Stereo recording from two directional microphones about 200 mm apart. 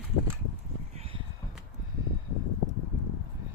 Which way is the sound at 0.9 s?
30° right (ahead or behind).